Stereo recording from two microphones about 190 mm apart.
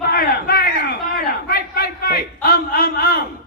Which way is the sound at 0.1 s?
50° left (ahead or behind).